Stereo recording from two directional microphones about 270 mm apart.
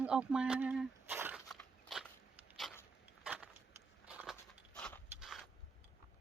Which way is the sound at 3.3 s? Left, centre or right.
Centre.